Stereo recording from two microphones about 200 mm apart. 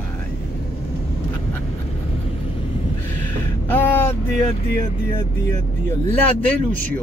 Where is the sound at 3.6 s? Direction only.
10° left (ahead or behind).